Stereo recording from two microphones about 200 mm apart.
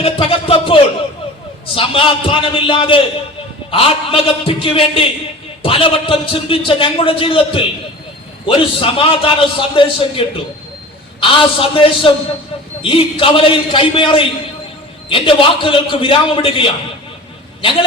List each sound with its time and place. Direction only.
0.0 s a man's voice: 25° left (ahead or behind)